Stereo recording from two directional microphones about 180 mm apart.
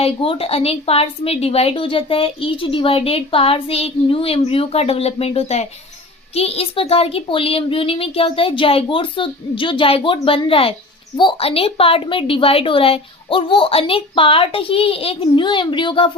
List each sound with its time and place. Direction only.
0.0 s a woman's voice: 30° left (ahead or behind)